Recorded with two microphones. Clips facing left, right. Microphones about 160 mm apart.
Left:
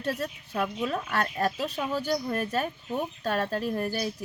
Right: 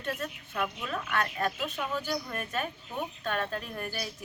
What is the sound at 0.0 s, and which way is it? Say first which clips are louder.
Speech: left 4 dB; 35° left (ahead or behind).